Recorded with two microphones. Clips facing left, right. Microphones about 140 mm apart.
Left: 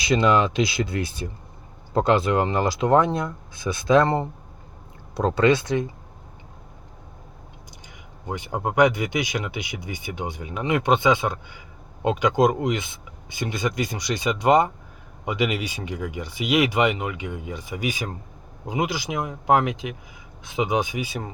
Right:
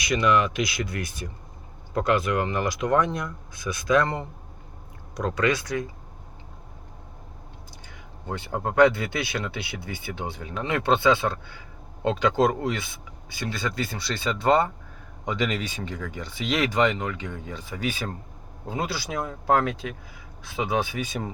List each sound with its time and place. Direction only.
0.0 s speech: 25° left (ahead or behind)
8.3 s speech: 15° left (ahead or behind)